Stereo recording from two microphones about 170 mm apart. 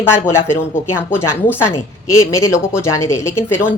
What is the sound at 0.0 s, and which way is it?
A woman's voice, 15° left (ahead or behind).